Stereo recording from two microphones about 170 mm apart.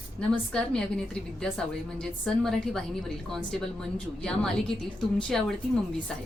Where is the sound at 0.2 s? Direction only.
5° left (ahead or behind).